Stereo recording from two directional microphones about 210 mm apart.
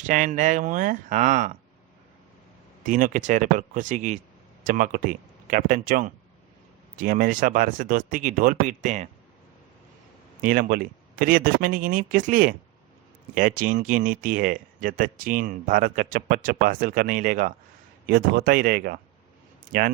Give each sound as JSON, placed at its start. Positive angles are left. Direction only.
{"t": 0.0, "sound": "speech", "side_deg": -35}
{"t": 2.8, "sound": "speech", "side_deg": -35}
{"t": 10.4, "sound": "speech", "side_deg": -45}